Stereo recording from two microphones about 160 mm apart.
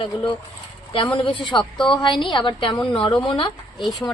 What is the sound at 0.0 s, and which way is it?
A woman's voice, 30° left (ahead or behind).